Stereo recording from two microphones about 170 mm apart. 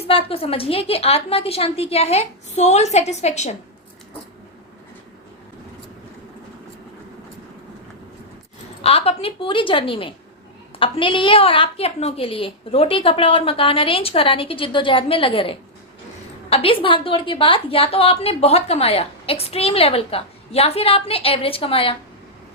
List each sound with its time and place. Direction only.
0.1 s a woman's voice: 35° left (ahead or behind)
8.8 s a woman's voice: 35° left (ahead or behind)